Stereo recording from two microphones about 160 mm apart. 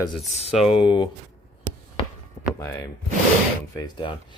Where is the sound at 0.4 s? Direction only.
40° left (ahead or behind).